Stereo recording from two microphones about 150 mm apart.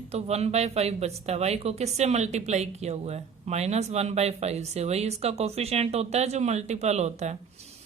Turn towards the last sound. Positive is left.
turn(degrees=-50)  # may be behind; listen again after turning